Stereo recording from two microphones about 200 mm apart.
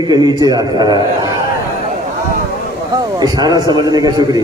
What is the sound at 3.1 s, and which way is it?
A man's voice, 20° right (ahead or behind).